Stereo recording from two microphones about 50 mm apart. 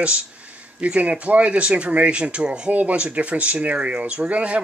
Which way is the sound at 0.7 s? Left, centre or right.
Right.